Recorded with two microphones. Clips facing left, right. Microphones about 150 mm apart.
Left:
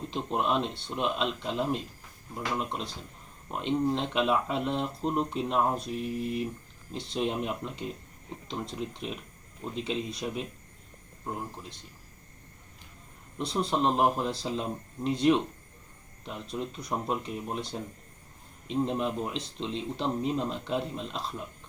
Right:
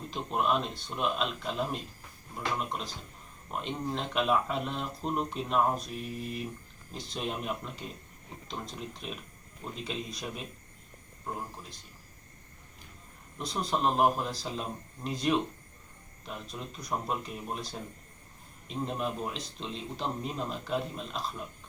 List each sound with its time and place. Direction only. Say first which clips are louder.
0.1 s a man's voice: even; 25° left (ahead or behind)
13.4 s a man's voice: left 3 dB; 25° left (ahead or behind)